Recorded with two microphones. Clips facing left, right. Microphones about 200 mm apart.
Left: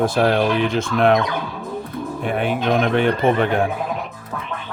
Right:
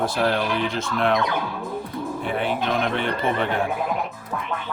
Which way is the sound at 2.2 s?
50° left (ahead or behind).